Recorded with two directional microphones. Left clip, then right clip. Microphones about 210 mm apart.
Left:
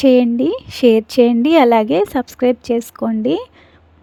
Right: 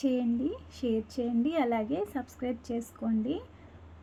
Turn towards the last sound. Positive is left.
turn(degrees=40)  # may be behind; listen again after turning